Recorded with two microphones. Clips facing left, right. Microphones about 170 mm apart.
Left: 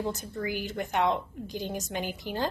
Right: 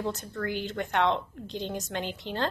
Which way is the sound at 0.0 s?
15° left (ahead or behind).